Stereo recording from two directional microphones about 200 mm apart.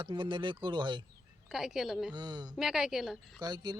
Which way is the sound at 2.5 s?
Centre (ahead or behind).